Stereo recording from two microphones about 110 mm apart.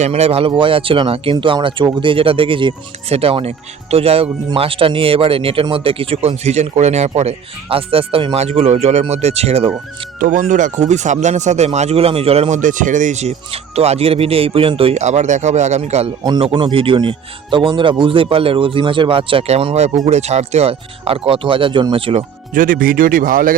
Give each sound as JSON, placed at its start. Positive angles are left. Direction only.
{"t": 0.0, "sound": "speech", "side_deg": -70}
{"t": 3.1, "sound": "speech", "side_deg": -65}
{"t": 8.4, "sound": "speech", "side_deg": -70}
{"t": 9.6, "sound": "speech", "side_deg": -55}
{"t": 10.8, "sound": "speech", "side_deg": -90}
{"t": 16.2, "sound": "speech", "side_deg": -45}
{"t": 19.5, "sound": "speech", "side_deg": -65}
{"t": 20.1, "sound": "speech", "side_deg": -85}